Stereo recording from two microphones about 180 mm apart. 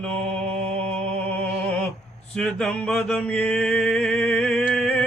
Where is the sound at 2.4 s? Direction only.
5° left (ahead or behind).